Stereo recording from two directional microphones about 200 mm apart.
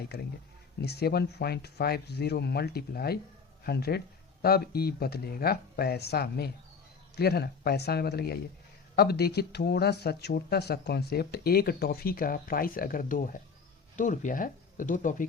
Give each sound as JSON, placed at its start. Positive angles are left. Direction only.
{"t": 0.1, "sound": "speech", "side_deg": 55}